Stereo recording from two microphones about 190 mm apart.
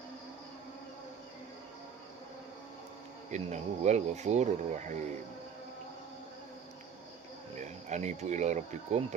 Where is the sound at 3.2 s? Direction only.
40° right (ahead or behind).